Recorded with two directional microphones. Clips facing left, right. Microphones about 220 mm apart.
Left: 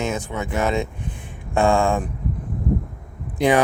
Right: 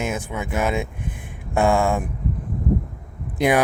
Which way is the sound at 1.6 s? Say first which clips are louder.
Left 1 dB; 15° right (ahead or behind).